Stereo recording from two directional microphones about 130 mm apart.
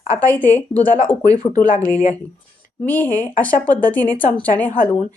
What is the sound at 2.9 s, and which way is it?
A woman's voice, 15° left (ahead or behind).